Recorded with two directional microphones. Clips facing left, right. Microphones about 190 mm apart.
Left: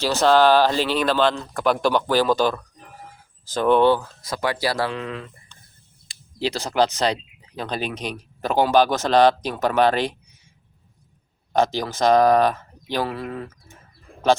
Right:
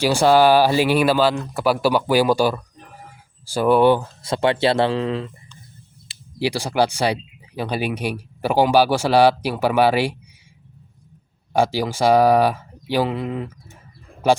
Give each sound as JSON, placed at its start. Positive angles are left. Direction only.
{"t": 0.0, "sound": "speech", "side_deg": -10}
{"t": 4.0, "sound": "speech", "side_deg": -25}
{"t": 6.4, "sound": "speech", "side_deg": -10}
{"t": 11.5, "sound": "speech", "side_deg": -10}